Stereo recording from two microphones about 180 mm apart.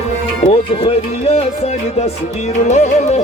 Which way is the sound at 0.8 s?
35° left (ahead or behind).